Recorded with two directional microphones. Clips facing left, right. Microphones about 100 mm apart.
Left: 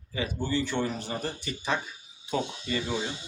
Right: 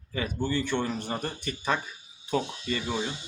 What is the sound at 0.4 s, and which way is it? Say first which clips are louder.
Speech: even; 50° right (ahead or behind).